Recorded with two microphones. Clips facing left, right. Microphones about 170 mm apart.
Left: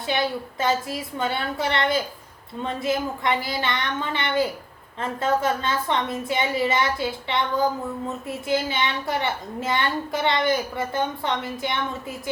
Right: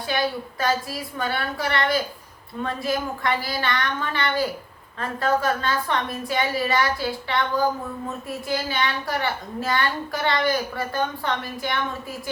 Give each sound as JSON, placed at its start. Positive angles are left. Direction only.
{"t": 0.1, "sound": "a woman's voice", "side_deg": 20}